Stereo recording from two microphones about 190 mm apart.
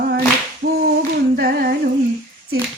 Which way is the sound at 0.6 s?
55° right (ahead or behind).